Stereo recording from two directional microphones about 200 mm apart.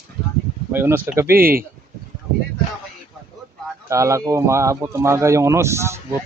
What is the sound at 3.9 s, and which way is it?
Speech, 15° right (ahead or behind).